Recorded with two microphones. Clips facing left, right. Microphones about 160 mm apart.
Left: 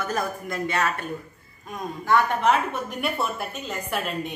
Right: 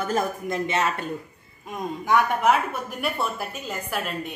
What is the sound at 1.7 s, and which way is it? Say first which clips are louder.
A woman's voice: even; 15° right (ahead or behind).